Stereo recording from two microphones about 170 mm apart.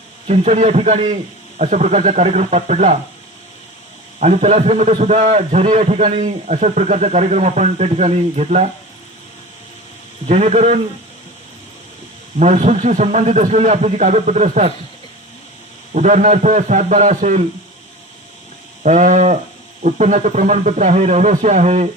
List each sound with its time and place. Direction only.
0.3 s a man's voice: 40° right (ahead or behind)
4.2 s a man's voice: 40° right (ahead or behind)
10.2 s a man's voice: 40° right (ahead or behind)
12.4 s a man's voice: 40° right (ahead or behind)
16.0 s a man's voice: 45° right (ahead or behind)
18.8 s a man's voice: 45° right (ahead or behind)